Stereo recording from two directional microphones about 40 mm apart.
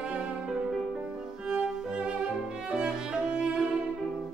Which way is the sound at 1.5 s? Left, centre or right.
Right.